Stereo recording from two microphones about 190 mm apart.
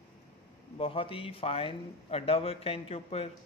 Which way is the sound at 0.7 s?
30° left (ahead or behind).